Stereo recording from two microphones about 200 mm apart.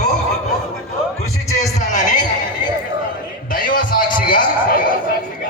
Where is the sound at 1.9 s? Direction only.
40° left (ahead or behind).